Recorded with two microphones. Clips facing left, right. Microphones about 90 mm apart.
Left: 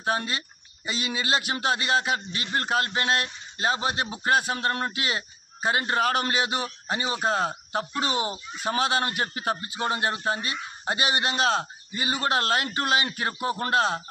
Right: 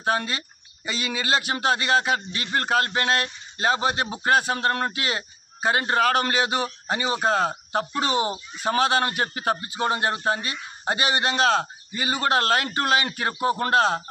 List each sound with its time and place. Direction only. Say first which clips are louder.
0.0 s speech: right 3 dB; 65° right (ahead or behind)
0.8 s speech: right 2 dB; 45° right (ahead or behind)
4.5 s speech: right 3 dB; 65° right (ahead or behind)
9.8 s speech: right 3 dB; 45° right (ahead or behind)
10.9 s speech: right 3 dB; 40° right (ahead or behind)